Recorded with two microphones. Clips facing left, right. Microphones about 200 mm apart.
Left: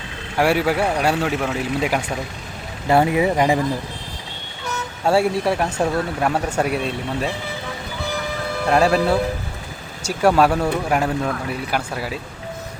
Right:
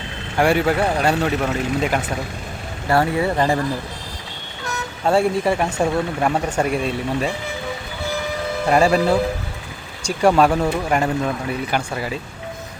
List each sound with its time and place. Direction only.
0.3 s speech: 5° left (ahead or behind)
2.9 s speech: 20° left (ahead or behind)
5.0 s speech: 5° left (ahead or behind)
8.6 s speech: centre (ahead or behind)